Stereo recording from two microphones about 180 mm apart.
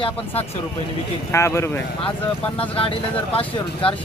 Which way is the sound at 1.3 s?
15° left (ahead or behind).